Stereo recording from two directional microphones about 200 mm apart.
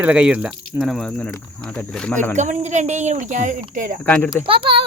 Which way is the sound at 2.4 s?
35° right (ahead or behind).